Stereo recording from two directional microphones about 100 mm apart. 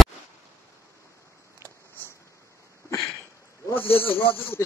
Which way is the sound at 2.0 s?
20° left (ahead or behind).